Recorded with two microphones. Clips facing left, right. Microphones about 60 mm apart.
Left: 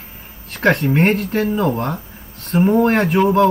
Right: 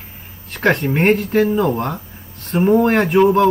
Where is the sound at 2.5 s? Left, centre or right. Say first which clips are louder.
Even; centre.